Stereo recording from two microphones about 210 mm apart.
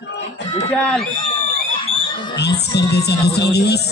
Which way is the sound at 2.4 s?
50° left (ahead or behind).